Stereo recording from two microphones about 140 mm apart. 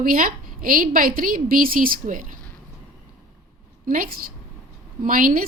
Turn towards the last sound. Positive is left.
turn(degrees=-90)